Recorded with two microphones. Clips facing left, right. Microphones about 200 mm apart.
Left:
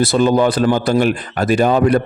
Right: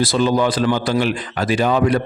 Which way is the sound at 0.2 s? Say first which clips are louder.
Left 3 dB; 50° left (ahead or behind).